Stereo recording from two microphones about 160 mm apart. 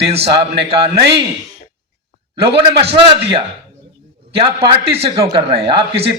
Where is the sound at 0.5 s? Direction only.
90° right.